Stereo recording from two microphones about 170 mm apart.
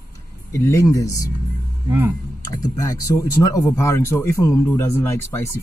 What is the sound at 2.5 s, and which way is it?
Speech, 20° left (ahead or behind).